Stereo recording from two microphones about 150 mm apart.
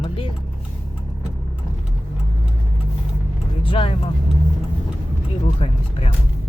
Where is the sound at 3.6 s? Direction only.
35° left (ahead or behind).